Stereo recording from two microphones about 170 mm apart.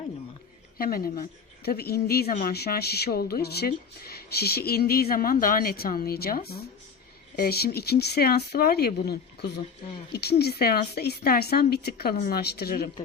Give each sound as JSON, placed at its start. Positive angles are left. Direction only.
{"t": 0.8, "sound": "speech", "side_deg": 60}